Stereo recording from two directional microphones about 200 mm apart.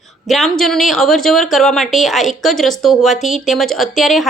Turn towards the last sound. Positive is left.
turn(degrees=0)  # may be behind; listen again after turning